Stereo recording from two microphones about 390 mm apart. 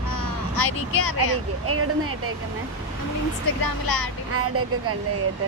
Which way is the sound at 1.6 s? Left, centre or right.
Right.